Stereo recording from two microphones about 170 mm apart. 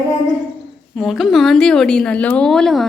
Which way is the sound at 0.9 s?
Centre (ahead or behind).